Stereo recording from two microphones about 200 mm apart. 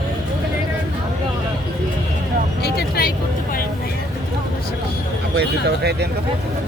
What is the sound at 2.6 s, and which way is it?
Speech, 50° left (ahead or behind).